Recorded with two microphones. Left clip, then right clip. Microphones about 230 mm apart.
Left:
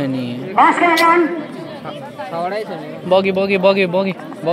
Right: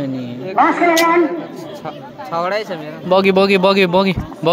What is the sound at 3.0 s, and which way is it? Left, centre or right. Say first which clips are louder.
Speech: right 2 dB; centre.